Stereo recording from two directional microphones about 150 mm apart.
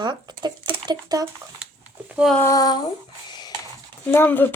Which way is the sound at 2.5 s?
25° left (ahead or behind).